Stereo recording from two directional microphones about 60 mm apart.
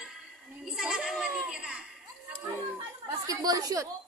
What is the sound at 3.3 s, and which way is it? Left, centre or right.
Speech, right.